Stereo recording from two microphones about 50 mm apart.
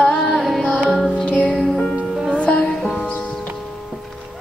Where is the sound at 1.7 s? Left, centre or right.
Left.